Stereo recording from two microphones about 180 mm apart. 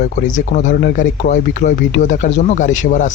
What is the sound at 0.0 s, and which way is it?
Speech, 45° left (ahead or behind).